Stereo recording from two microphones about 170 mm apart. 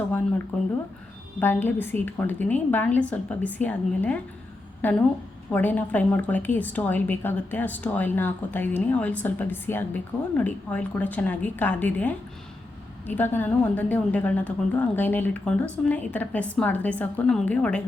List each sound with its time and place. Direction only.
1.4 s a woman's voice: 10° left (ahead or behind)